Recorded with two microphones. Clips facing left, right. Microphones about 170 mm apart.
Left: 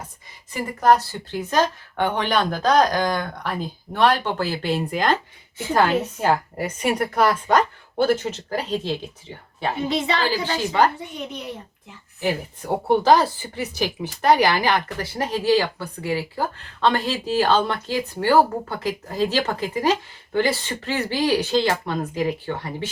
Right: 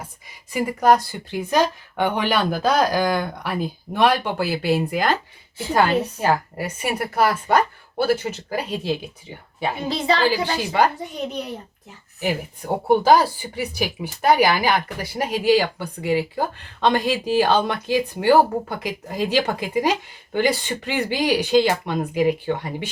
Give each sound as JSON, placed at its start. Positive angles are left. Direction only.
{"t": 0.5, "sound": "speech", "side_deg": -10}
{"t": 9.9, "sound": "speech", "side_deg": -35}
{"t": 10.2, "sound": "speech", "side_deg": -15}
{"t": 11.0, "sound": "speech", "side_deg": -35}
{"t": 13.0, "sound": "speech", "side_deg": -10}